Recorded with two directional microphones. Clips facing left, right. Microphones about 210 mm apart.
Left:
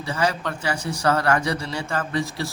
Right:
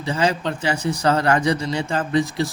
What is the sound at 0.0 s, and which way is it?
A man's voice, 20° right (ahead or behind).